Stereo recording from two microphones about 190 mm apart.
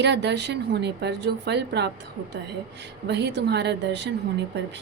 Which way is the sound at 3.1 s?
65° right (ahead or behind).